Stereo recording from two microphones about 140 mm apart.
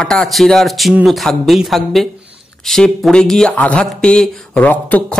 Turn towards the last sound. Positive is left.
turn(degrees=10)  # may be behind; listen again after turning